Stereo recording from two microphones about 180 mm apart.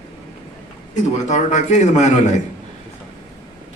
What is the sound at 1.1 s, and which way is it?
A man's voice, 40° left (ahead or behind).